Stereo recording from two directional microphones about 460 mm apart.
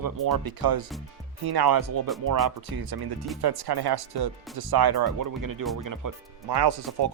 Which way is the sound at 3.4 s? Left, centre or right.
Right.